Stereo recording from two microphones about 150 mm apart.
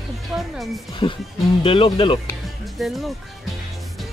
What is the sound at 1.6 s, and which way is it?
Speech, 35° left (ahead or behind).